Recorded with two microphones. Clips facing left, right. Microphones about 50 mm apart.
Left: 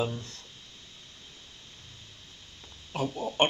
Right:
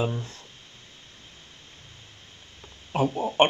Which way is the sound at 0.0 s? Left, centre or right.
Right.